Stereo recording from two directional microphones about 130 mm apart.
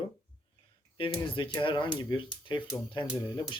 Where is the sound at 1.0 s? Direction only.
40° left (ahead or behind).